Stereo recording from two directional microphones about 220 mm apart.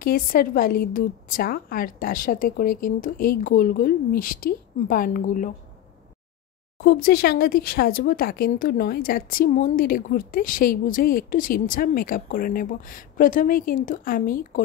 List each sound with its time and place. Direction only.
0.0 s a woman's voice: 40° left (ahead or behind)
7.0 s a woman's voice: 45° left (ahead or behind)